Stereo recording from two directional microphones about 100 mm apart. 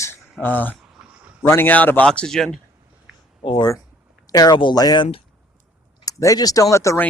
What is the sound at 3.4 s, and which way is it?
Speech, 60° left (ahead or behind).